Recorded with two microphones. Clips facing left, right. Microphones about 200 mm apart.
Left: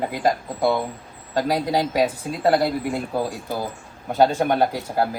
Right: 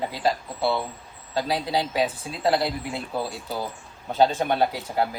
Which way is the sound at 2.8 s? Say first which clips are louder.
Left 5 dB; 15° left (ahead or behind).